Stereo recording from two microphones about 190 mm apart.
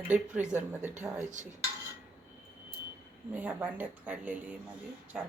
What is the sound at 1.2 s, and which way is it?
Dishes, 40° right (ahead or behind).